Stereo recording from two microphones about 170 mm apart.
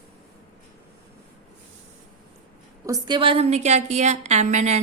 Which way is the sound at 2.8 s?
20° right (ahead or behind).